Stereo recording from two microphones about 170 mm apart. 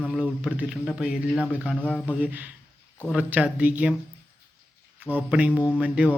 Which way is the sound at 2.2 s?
10° right (ahead or behind).